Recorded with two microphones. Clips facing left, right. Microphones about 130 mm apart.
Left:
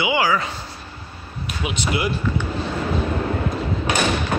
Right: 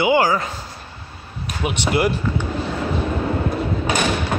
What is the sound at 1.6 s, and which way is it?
Speech, 50° right (ahead or behind).